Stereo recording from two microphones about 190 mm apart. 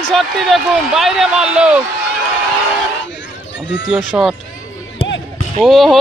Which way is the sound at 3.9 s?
Centre (ahead or behind).